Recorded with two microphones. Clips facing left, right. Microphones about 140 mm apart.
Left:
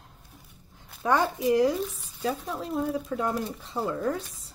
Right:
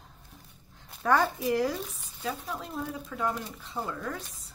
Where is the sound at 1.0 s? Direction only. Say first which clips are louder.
Left 2 dB; 15° left (ahead or behind).